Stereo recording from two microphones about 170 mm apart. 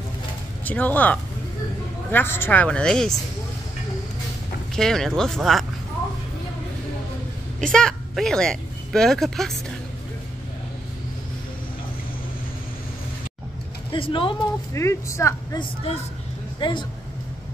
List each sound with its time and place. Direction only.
0.7 s speech: 10° left (ahead or behind)
4.7 s speech: 5° left (ahead or behind)
7.6 s speech: 5° left (ahead or behind)
13.9 s speech: 30° left (ahead or behind)
14.7 s speech: 15° left (ahead or behind)
16.5 s speech: 25° left (ahead or behind)